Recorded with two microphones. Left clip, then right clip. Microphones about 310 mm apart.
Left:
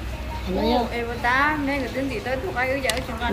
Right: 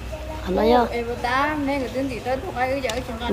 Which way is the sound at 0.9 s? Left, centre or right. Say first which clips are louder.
Left 1 dB; right.